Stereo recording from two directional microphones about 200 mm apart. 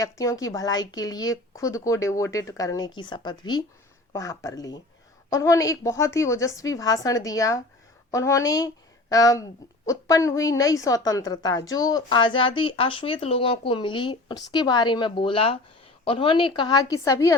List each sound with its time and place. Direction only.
0.0 s a woman's voice: 15° left (ahead or behind)